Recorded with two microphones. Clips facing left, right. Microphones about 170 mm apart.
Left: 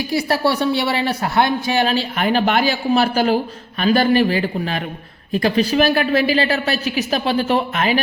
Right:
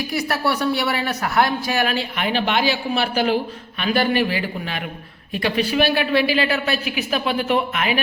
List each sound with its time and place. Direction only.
0.1 s speech: 30° left (ahead or behind)
2.1 s a woman's voice: 45° left (ahead or behind)